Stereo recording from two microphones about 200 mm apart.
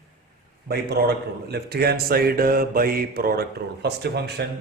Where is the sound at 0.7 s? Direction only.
55° right (ahead or behind).